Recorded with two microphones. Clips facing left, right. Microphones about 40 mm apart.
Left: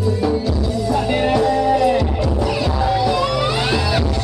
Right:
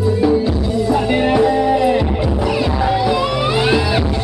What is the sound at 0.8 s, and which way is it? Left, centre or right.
Music, centre.